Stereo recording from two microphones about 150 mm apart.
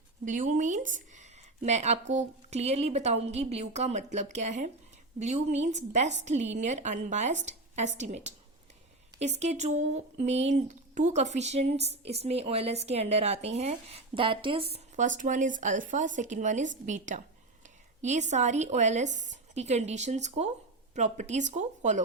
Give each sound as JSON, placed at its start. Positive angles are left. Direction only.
{"t": 0.3, "sound": "speech", "side_deg": -60}
{"t": 14.9, "sound": "speech", "side_deg": -60}